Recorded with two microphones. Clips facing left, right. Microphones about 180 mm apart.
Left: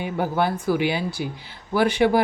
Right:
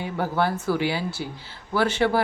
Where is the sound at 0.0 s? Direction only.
15° left (ahead or behind).